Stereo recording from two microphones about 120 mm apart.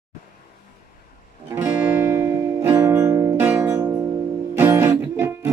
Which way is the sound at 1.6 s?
20° right (ahead or behind).